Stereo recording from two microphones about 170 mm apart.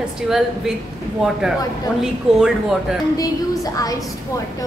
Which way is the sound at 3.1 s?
20° left (ahead or behind).